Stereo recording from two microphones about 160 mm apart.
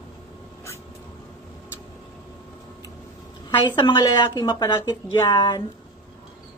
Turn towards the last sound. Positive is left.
turn(degrees=25)  # may be behind; listen again after turning